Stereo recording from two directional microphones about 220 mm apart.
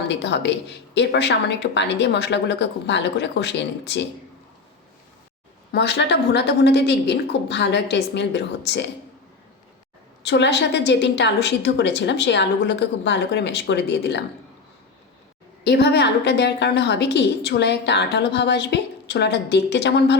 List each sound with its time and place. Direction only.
0.1 s a woman's voice: 50° left (ahead or behind)
5.7 s a woman's voice: 50° left (ahead or behind)
10.2 s a woman's voice: 50° left (ahead or behind)
15.6 s a woman's voice: 50° left (ahead or behind)